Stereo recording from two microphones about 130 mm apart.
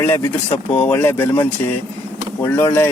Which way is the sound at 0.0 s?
15° left (ahead or behind).